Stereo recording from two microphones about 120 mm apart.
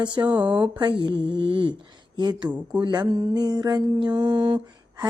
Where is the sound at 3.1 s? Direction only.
40° right (ahead or behind).